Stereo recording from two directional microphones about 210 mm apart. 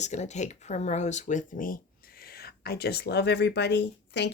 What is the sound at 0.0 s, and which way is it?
Speech, 35° left (ahead or behind).